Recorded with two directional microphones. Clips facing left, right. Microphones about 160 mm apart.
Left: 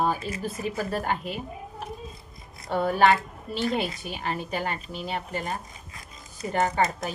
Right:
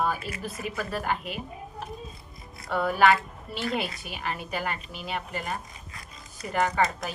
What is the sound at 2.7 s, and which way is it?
A woman's voice, 30° left (ahead or behind).